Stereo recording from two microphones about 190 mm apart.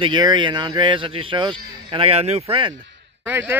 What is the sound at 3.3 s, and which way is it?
Speech, 10° right (ahead or behind).